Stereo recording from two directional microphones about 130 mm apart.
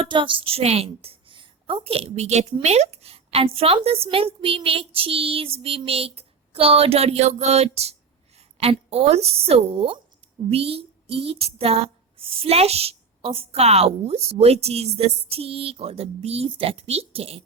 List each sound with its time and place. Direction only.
0.0 s a woman's voice: 40° right (ahead or behind)